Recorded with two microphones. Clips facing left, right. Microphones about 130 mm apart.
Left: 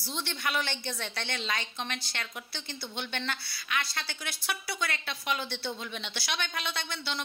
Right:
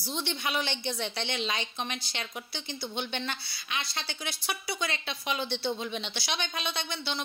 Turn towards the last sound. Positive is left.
turn(degrees=-20)  # may be behind; listen again after turning